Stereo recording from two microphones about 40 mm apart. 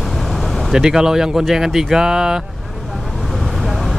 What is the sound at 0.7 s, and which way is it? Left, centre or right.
Speech, centre.